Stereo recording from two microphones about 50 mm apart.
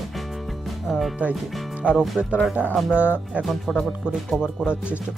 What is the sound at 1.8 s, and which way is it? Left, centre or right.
Speech, centre.